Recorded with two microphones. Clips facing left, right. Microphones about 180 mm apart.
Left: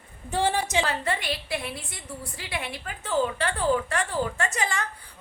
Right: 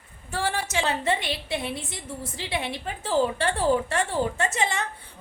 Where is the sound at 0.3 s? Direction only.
20° left (ahead or behind).